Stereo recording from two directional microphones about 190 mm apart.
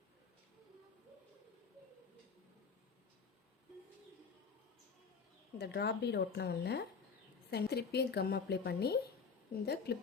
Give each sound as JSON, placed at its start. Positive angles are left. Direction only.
{"t": 5.5, "sound": "a woman's voice", "side_deg": 55}